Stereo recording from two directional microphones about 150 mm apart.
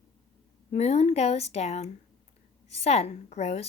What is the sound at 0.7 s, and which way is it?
A woman's voice, 45° left (ahead or behind).